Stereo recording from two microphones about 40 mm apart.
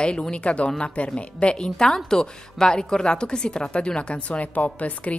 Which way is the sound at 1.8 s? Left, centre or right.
Centre.